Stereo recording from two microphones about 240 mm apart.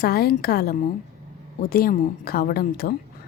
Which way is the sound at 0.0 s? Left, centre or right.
Left.